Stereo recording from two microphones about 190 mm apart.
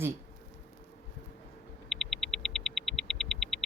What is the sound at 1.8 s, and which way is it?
Hum, centre (ahead or behind).